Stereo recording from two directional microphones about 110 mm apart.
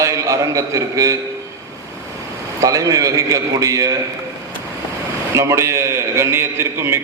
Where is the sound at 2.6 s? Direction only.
30° right (ahead or behind).